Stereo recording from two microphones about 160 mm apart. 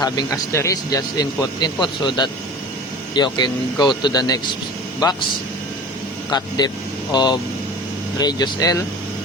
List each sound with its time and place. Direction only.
0.0 s speech: 25° left (ahead or behind)
6.3 s speech: 25° left (ahead or behind)